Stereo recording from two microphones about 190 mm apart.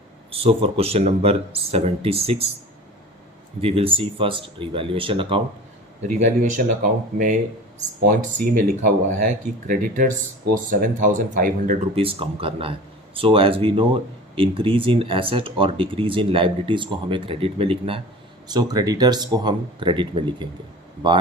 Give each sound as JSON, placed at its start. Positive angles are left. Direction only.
{"t": 0.3, "sound": "speech", "side_deg": -30}
{"t": 3.6, "sound": "speech", "side_deg": -30}
{"t": 6.0, "sound": "speech", "side_deg": -40}
{"t": 11.9, "sound": "speech", "side_deg": -30}